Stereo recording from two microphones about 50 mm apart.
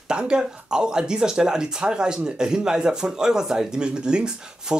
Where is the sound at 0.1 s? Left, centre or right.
Centre.